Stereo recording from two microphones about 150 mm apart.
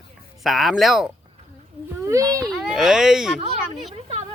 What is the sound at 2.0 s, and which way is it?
Speech, 20° right (ahead or behind).